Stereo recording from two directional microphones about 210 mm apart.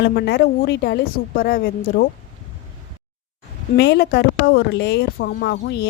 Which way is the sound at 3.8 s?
55° left (ahead or behind).